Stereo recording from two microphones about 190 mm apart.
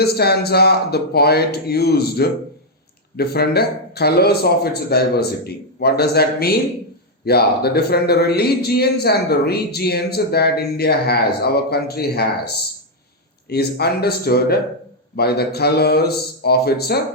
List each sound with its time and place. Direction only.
0.0 s a man's voice: 55° left (ahead or behind)
13.5 s a man's voice: 55° left (ahead or behind)